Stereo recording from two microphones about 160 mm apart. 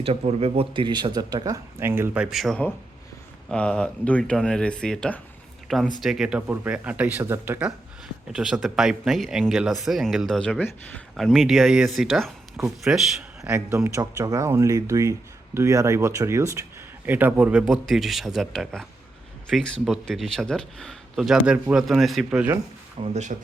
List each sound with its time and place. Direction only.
0.0 s speech: 40° right (ahead or behind); by 13.2 s 5° right (ahead or behind)
13.4 s speech: 15° right (ahead or behind)
23.0 s speech: 45° right (ahead or behind)